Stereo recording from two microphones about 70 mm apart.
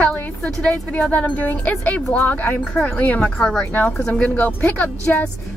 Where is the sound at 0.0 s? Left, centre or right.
Left.